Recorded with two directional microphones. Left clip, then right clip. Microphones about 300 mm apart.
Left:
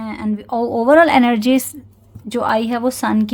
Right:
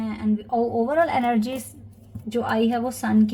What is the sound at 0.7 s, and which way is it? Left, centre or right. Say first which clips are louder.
Speech: left 13 dB; left.